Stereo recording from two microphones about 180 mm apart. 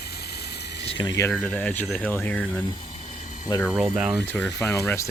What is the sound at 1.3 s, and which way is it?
Speech, 5° left (ahead or behind).